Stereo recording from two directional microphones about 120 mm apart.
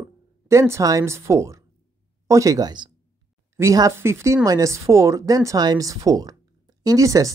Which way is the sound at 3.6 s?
25° right (ahead or behind).